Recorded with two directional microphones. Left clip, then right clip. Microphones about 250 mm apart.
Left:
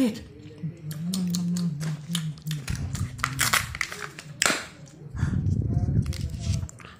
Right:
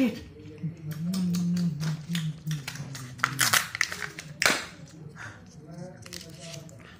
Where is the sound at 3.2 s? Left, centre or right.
Centre.